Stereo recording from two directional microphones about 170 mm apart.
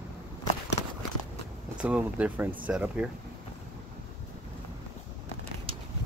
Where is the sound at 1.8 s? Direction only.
10° right (ahead or behind).